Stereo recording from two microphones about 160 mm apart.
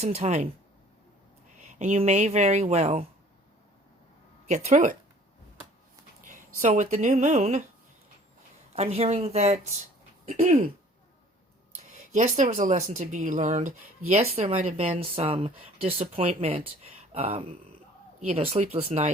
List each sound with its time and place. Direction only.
0.0 s speech: 45° right (ahead or behind)
1.8 s speech: 45° right (ahead or behind)
4.4 s speech: 45° right (ahead or behind)
6.2 s speech: 50° right (ahead or behind)
8.7 s speech: 40° right (ahead or behind)
11.7 s speech: 50° right (ahead or behind)